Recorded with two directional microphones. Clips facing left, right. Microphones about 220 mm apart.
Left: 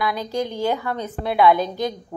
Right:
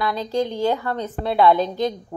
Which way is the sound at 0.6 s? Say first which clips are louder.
Right 1 dB; 15° left (ahead or behind).